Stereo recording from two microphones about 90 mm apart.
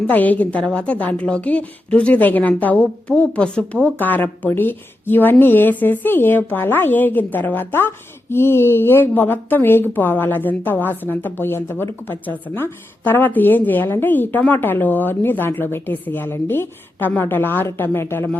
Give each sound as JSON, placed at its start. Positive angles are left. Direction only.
{"t": 0.1, "sound": "a woman's voice", "side_deg": 20}